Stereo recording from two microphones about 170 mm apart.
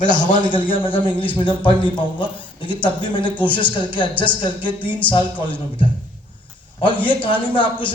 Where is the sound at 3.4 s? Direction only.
10° left (ahead or behind).